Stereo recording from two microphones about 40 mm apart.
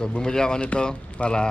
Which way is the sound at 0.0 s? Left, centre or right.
Centre.